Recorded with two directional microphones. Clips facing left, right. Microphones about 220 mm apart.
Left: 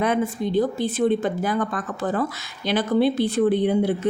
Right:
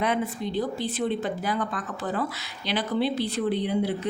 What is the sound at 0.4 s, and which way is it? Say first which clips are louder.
Speech: left 6 dB; 50° left (ahead or behind).